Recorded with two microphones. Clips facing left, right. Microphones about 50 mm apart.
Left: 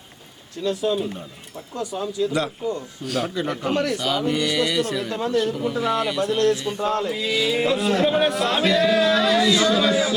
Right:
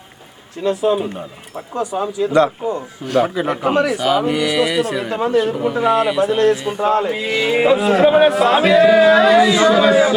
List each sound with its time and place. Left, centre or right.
0.6 s speech: right
3.0 s speech: centre
3.6 s speech: right
3.9 s speech: centre
4.9 s speech: right; by 6.4 s centre
6.4 s speech: right
7.7 s speech: centre